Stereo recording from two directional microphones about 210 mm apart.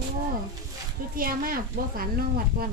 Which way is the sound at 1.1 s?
40° right (ahead or behind).